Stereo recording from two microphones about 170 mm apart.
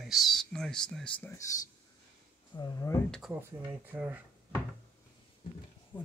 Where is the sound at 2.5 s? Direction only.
20° left (ahead or behind).